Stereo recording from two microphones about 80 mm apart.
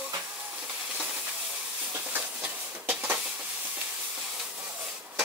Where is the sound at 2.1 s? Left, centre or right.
Right.